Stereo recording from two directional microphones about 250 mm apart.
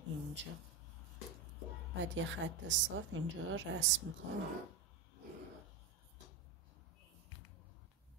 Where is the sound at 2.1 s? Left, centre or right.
Right.